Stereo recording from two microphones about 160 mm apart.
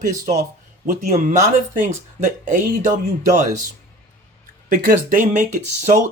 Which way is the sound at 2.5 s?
55° right (ahead or behind).